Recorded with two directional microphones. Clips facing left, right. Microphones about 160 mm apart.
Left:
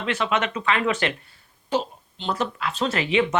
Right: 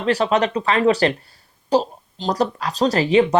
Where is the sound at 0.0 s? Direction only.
35° right (ahead or behind).